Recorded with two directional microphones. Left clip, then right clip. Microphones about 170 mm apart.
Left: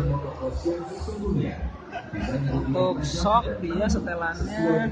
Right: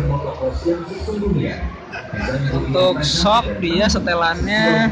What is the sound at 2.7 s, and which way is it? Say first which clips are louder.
A man's voice: right 10 dB; centre (ahead or behind).